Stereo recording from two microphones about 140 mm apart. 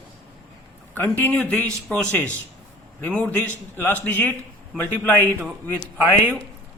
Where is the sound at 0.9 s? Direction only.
15° left (ahead or behind).